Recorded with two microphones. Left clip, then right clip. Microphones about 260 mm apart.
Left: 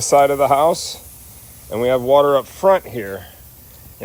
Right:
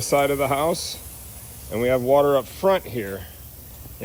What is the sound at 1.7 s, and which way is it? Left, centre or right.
Speech, left.